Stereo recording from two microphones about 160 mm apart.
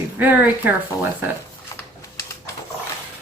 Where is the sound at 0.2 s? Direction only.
10° right (ahead or behind).